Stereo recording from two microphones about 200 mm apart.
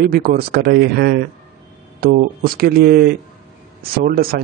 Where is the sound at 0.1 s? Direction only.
50° right (ahead or behind).